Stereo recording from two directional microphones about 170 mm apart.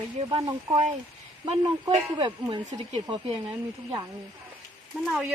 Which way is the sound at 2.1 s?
30° right (ahead or behind).